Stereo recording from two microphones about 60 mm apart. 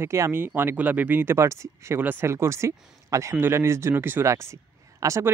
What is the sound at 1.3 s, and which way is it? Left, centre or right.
Speech, right.